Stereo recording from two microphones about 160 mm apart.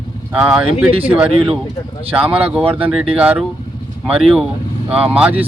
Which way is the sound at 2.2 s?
35° right (ahead or behind).